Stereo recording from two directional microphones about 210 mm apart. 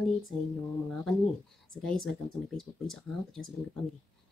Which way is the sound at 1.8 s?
Centre (ahead or behind).